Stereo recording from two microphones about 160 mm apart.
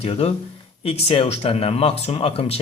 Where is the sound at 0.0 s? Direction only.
40° left (ahead or behind).